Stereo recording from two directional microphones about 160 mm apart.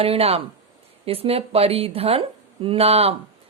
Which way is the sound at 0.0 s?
40° right (ahead or behind).